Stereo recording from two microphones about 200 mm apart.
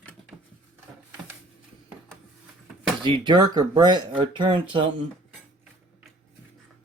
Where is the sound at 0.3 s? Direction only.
5° right (ahead or behind).